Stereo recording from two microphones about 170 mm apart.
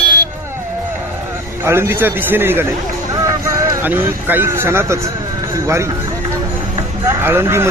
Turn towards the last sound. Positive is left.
turn(degrees=-15)  # may be behind; listen again after turning